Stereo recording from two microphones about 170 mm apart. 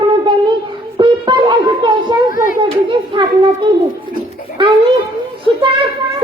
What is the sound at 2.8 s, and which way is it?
Speech, 30° right (ahead or behind).